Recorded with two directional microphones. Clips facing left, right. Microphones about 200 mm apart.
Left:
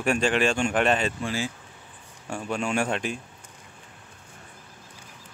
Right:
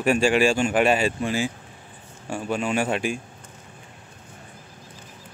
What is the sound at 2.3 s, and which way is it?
Speech, 5° right (ahead or behind).